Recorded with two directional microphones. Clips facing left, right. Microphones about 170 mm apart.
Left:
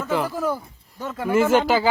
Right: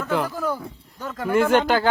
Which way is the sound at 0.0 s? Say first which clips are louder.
Left 1 dB; centre (ahead or behind).